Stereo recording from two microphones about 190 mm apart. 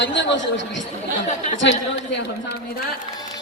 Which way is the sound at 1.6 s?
70° left (ahead or behind).